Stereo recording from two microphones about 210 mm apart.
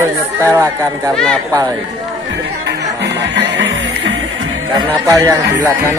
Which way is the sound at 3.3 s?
55° right (ahead or behind).